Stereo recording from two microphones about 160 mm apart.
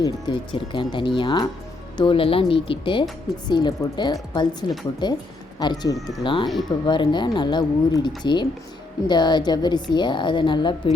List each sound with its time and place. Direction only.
0.0 s a woman's voice: 30° left (ahead or behind)